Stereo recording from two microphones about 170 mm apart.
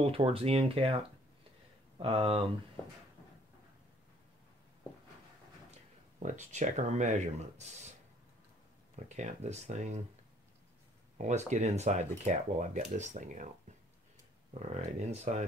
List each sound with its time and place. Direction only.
0.0 s speech: 35° right (ahead or behind)
2.0 s speech: 35° right (ahead or behind)
6.1 s speech: 45° right (ahead or behind)
9.1 s speech: 40° right (ahead or behind)
11.1 s speech: 45° right (ahead or behind)
14.6 s speech: 40° right (ahead or behind)